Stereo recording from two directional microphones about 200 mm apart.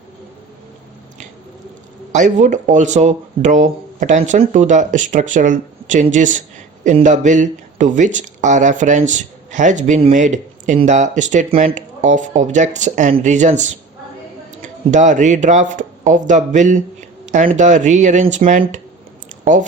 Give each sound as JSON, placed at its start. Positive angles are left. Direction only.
{"t": 2.1, "sound": "speech", "side_deg": -40}